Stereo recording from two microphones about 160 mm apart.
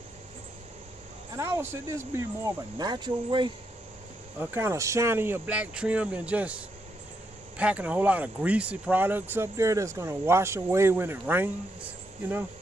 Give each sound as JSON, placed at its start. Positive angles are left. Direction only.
{"t": 1.3, "sound": "speech", "side_deg": -20}
{"t": 4.4, "sound": "speech", "side_deg": -15}